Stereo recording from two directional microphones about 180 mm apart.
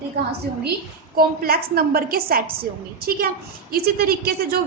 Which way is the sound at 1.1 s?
55° right (ahead or behind).